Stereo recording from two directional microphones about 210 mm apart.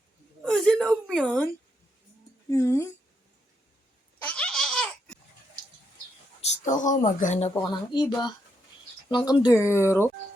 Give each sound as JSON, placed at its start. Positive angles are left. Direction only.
{"t": 0.4, "sound": "speech", "side_deg": 5}
{"t": 2.5, "sound": "speech", "side_deg": 15}
{"t": 4.2, "sound": "laughter", "side_deg": 5}
{"t": 6.5, "sound": "speech", "side_deg": 35}
{"t": 7.6, "sound": "speech", "side_deg": 20}